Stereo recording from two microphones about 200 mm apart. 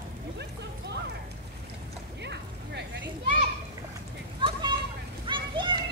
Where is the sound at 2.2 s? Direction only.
60° right (ahead or behind).